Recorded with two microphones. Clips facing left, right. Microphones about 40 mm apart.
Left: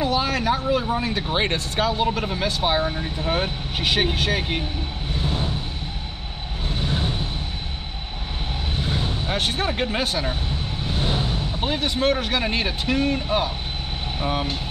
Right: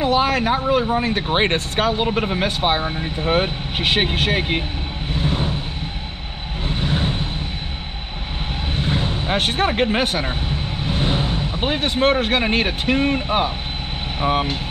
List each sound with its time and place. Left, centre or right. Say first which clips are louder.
0.0 s speech: right 4 dB; right
5.2 s vehicle: right 4 dB; right
6.7 s vehicle: right 4 dB; right
8.7 s speech: right 4 dB; right